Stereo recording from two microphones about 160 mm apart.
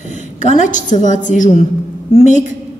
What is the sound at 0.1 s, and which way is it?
A woman's voice, 50° left (ahead or behind).